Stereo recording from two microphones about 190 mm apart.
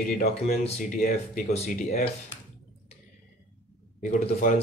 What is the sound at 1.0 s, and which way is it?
Speech, 50° left (ahead or behind).